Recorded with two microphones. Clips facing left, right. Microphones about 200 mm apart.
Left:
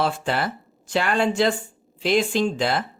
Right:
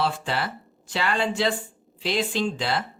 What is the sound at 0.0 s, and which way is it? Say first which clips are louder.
Speech: left 3 dB; 50° left (ahead or behind).